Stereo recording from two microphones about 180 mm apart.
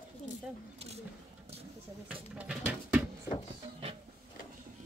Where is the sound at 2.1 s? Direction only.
10° right (ahead or behind).